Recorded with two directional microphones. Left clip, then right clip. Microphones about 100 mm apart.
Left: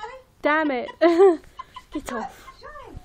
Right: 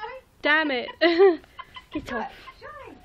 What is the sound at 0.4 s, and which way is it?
A woman's voice, 45° left (ahead or behind).